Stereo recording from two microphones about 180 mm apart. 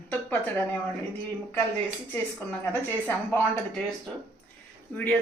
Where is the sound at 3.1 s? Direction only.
10° left (ahead or behind).